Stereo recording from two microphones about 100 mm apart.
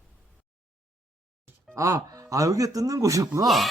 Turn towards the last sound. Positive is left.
turn(degrees=0)  # may be behind; listen again after turning